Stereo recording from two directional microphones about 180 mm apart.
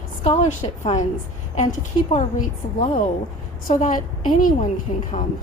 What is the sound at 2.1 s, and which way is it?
A woman's voice, 45° left (ahead or behind).